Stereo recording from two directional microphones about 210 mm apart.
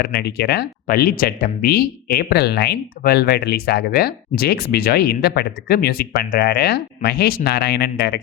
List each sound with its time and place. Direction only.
0.0 s speech: 50° left (ahead or behind)